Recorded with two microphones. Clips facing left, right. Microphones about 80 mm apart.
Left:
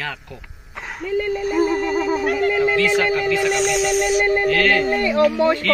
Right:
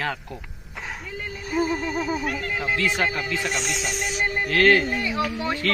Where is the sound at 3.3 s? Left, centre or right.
Left.